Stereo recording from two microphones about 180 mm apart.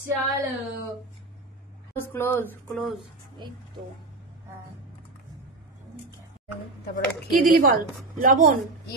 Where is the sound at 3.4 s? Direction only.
25° right (ahead or behind).